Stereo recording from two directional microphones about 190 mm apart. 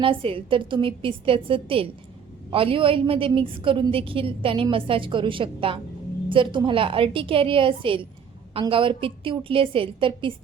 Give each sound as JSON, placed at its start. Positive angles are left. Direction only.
{"t": 0.0, "sound": "a woman's voice", "side_deg": -30}